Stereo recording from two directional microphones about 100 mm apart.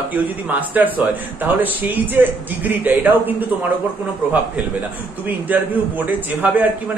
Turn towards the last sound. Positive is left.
turn(degrees=-15)  # may be behind; listen again after turning